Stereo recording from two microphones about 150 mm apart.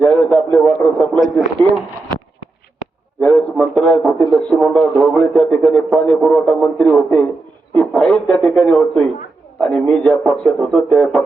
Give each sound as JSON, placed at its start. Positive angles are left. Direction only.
{"t": 0.2, "sound": "speech", "side_deg": 5}
{"t": 3.2, "sound": "a sound", "side_deg": 10}
{"t": 4.3, "sound": "speech", "side_deg": 0}